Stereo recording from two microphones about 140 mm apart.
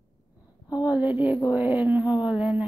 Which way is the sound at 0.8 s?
10° right (ahead or behind).